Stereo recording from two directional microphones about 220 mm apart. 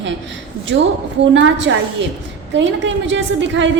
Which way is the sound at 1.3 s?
55° right (ahead or behind).